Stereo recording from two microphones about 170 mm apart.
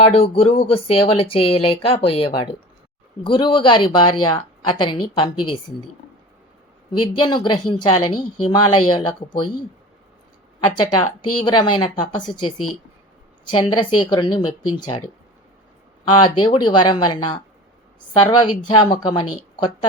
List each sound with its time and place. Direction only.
0.0 s a woman's voice: 35° left (ahead or behind)
7.2 s a woman's voice: 25° left (ahead or behind)
10.8 s a woman's voice: 30° left (ahead or behind)